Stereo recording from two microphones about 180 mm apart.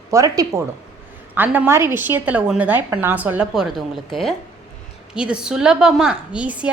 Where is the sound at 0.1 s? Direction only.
15° right (ahead or behind).